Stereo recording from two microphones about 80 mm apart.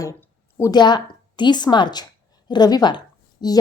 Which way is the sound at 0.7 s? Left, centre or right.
Left.